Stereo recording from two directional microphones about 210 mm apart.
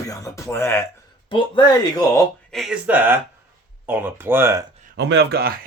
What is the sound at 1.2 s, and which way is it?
Speech, 20° left (ahead or behind).